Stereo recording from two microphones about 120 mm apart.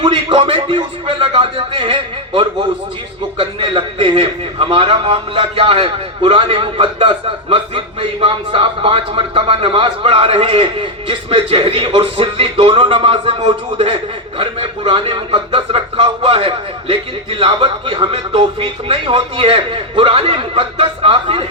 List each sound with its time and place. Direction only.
0.0 s a man's voice: 45° right (ahead or behind)